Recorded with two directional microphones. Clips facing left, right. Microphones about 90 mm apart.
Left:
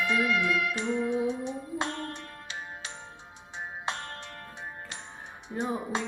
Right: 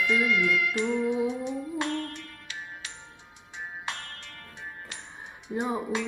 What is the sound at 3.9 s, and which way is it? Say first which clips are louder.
Music: left 3 dB; 25° left (ahead or behind).